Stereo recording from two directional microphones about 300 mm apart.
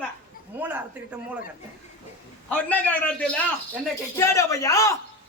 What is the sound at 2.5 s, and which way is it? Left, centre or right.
A man's voice, centre.